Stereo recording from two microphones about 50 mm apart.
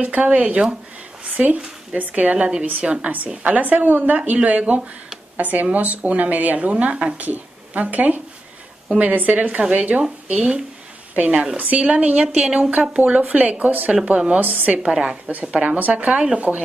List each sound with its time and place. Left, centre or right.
0.0 s a woman's voice: right
9.3 s a woman's voice: right
12.4 s a woman's voice: centre